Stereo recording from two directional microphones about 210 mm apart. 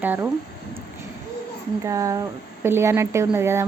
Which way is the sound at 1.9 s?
15° right (ahead or behind).